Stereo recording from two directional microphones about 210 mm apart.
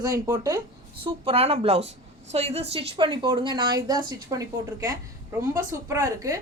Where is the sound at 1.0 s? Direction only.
25° right (ahead or behind).